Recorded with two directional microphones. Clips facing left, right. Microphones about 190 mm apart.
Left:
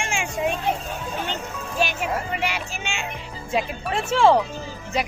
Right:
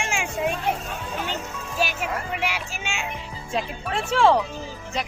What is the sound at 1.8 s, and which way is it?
Speech, 5° right (ahead or behind).